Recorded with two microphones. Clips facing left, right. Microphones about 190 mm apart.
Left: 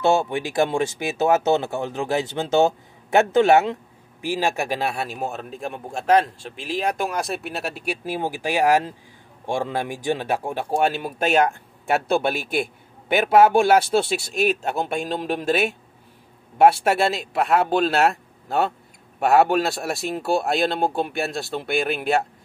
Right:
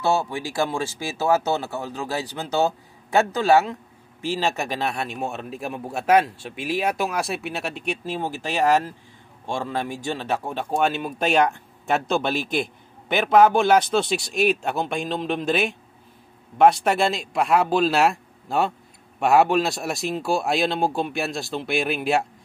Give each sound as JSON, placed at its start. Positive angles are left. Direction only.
{"t": 0.0, "sound": "a man's voice", "side_deg": 20}
{"t": 14.4, "sound": "speech", "side_deg": 45}
{"t": 15.3, "sound": "a man's voice", "side_deg": 5}